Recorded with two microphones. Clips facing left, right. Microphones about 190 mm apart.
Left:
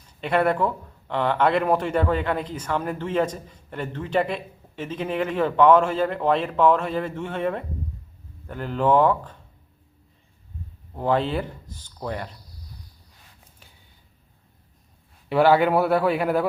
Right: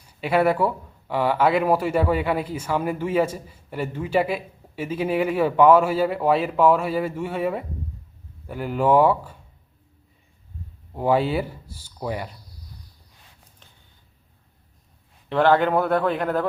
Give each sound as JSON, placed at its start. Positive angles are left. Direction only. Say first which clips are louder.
{"t": 0.2, "sound": "speech", "louder": "right 2 dB", "side_deg": -5}
{"t": 10.9, "sound": "speech", "louder": "right 2 dB", "side_deg": -10}
{"t": 15.3, "sound": "a man's voice", "louder": "left 1 dB", "side_deg": 10}